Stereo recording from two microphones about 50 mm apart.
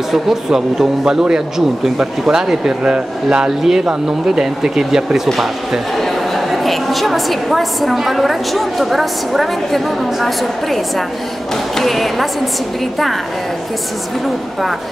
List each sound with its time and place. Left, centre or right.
0.1 s a woman's voice: centre